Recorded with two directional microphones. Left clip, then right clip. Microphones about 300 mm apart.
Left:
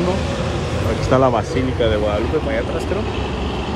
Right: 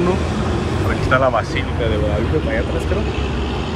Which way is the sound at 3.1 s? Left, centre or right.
Left.